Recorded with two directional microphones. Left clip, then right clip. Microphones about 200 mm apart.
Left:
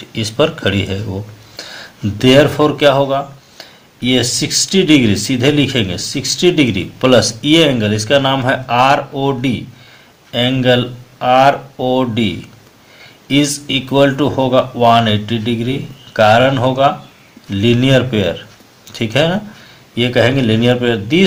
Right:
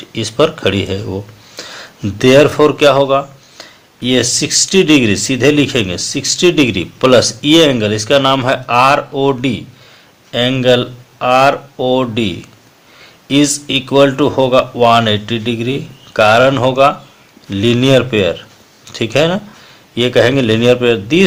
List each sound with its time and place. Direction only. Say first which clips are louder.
0.1 s speech: right 2 dB; 30° right (ahead or behind)